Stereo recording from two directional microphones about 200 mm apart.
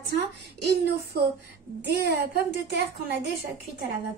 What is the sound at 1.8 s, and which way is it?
Speech, 55° right (ahead or behind).